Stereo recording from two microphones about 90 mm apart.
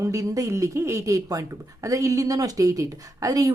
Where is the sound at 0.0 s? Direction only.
35° right (ahead or behind).